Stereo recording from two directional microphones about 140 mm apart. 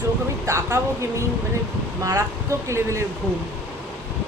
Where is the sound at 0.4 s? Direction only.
20° right (ahead or behind).